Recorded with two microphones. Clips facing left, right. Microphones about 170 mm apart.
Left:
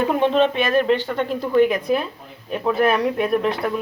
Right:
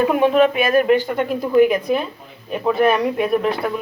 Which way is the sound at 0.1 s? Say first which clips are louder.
Right 3 dB; 10° right (ahead or behind).